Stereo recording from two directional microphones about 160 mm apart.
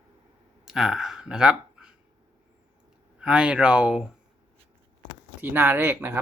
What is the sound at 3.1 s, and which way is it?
Speech, 5° right (ahead or behind).